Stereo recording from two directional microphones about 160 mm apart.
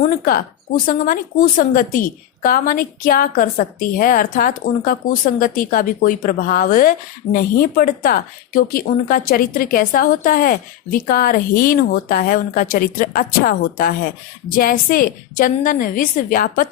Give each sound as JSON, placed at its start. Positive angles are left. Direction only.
{"t": 0.3, "sound": "speech", "side_deg": 65}